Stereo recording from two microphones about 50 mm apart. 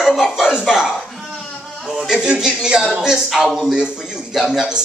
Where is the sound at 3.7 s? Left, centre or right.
Centre.